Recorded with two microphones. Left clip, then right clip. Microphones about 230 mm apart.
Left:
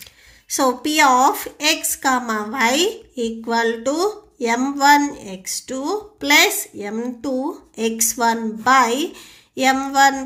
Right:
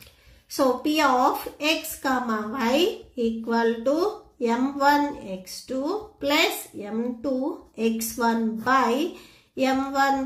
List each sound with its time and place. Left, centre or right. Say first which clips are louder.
0.6 s a woman's voice: left 5 dB; left